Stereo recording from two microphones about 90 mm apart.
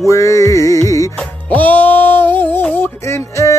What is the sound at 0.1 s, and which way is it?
Music, 35° left (ahead or behind).